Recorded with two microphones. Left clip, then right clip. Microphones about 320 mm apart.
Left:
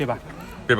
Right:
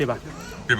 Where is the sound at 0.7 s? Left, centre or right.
Centre.